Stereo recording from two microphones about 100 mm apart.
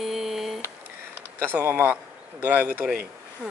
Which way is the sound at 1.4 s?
20° right (ahead or behind).